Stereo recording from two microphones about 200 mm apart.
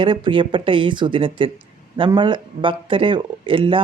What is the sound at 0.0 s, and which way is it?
Speech, 25° right (ahead or behind).